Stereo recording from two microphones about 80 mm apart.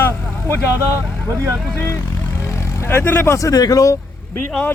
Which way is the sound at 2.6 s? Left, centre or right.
Left.